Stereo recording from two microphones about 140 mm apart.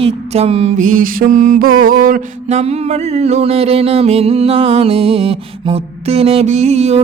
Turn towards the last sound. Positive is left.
turn(degrees=-50)  # may be behind; listen again after turning